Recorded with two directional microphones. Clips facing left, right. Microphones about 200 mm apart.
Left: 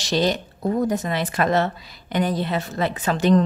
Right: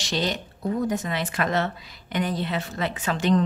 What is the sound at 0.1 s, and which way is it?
A woman's voice, 40° left (ahead or behind).